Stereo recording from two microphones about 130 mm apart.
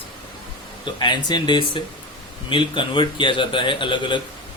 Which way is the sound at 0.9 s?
35° left (ahead or behind).